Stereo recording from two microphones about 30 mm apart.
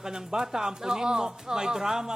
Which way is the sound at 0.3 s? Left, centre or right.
Centre.